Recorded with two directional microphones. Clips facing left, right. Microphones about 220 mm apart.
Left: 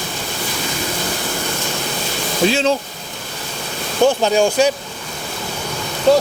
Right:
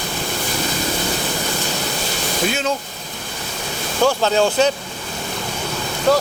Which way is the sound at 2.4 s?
30° left (ahead or behind).